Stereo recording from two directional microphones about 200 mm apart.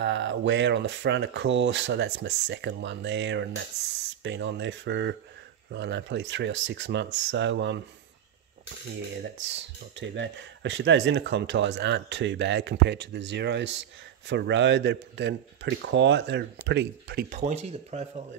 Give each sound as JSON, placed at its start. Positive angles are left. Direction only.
{"t": 0.0, "sound": "speech", "side_deg": -65}
{"t": 9.9, "sound": "speech", "side_deg": -65}
{"t": 17.4, "sound": "speech", "side_deg": -35}